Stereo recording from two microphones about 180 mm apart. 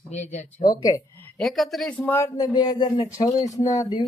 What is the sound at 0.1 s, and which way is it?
Speech, 40° left (ahead or behind).